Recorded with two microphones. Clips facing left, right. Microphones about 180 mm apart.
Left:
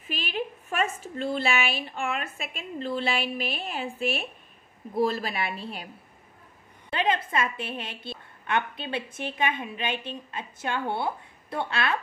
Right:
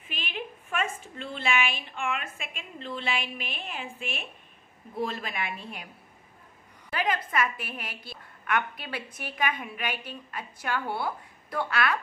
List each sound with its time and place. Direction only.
0.0 s a woman's voice: 40° left (ahead or behind)
6.9 s a woman's voice: 25° left (ahead or behind)